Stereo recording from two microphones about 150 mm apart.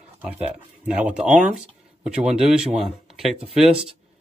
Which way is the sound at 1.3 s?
55° right (ahead or behind).